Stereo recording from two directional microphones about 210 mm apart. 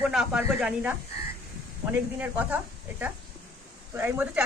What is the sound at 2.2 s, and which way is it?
Speech, 10° right (ahead or behind).